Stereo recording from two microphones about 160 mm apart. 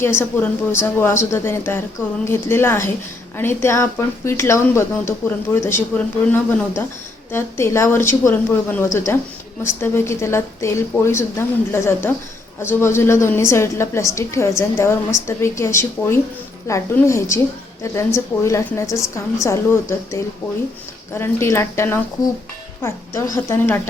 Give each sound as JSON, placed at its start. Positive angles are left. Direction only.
{"t": 0.0, "sound": "a woman's voice", "side_deg": 15}
{"t": 21.2, "sound": "a woman's voice", "side_deg": 15}